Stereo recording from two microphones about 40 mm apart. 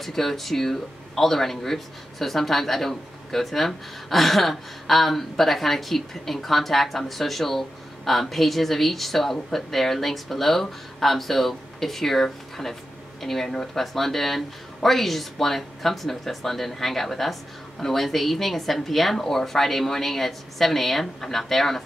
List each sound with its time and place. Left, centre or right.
0.0 s speech: centre